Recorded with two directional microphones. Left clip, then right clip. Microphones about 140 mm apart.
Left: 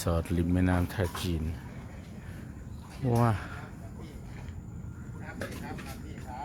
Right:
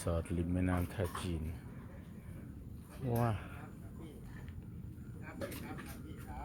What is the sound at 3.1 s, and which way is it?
Speech, 30° left (ahead or behind).